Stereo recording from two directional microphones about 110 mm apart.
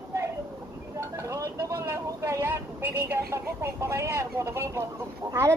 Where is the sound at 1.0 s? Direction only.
25° right (ahead or behind).